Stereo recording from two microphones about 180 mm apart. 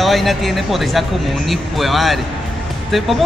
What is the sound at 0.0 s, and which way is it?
Speech, centre (ahead or behind).